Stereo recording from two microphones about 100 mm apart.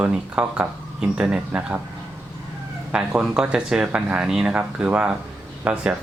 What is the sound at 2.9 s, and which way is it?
Speech, 10° right (ahead or behind).